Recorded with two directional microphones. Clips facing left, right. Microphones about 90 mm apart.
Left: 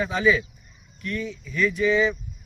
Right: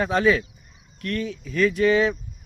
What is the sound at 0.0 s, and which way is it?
Speech, 55° right (ahead or behind).